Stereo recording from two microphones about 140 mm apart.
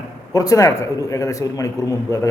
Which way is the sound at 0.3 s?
25° left (ahead or behind).